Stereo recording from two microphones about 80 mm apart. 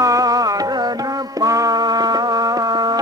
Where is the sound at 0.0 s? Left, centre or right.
Right.